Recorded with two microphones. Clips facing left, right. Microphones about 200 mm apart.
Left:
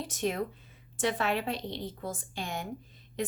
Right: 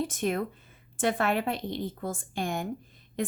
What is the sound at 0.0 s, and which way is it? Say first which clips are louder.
A woman's voice: right 3 dB; 55° right (ahead or behind).